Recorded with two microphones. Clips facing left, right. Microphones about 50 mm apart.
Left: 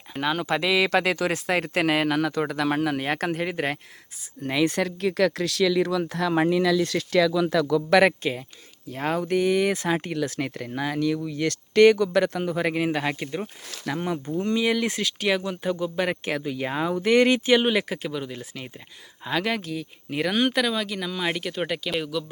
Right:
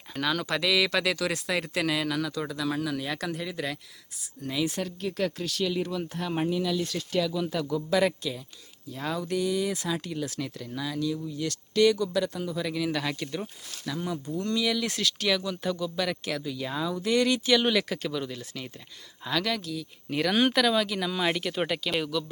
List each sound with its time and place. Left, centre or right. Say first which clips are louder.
0.2 s speech: left 3 dB; left
7.8 s speech: left 6 dB; left
12.9 s speech: left 4 dB; left
13.8 s speech: left 5 dB; left
14.3 s speech: left 4 dB; left
14.8 s speech: left 3 dB; left
20.1 s speech: left 1 dB; centre
20.3 s speech: right 1 dB; centre